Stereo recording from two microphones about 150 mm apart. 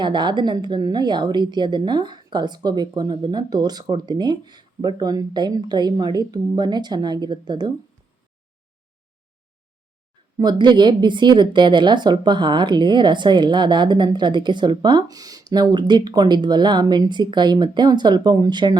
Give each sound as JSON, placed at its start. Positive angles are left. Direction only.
{"t": 0.0, "sound": "speech", "side_deg": -30}
{"t": 10.3, "sound": "speech", "side_deg": -30}